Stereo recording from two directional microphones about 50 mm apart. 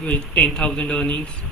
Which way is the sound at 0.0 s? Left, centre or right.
Left.